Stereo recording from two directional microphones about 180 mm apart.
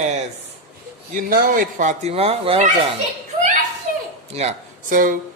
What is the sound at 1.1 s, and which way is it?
Speech, 50° right (ahead or behind).